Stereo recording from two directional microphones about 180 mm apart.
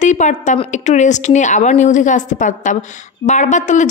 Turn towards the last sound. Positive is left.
turn(degrees=40)  # may be behind; listen again after turning